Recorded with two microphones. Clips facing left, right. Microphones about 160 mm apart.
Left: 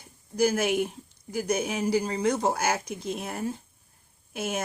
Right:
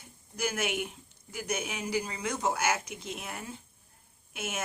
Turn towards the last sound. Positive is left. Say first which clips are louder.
# left 6 dB
turn(degrees=35)  # may be behind; listen again after turning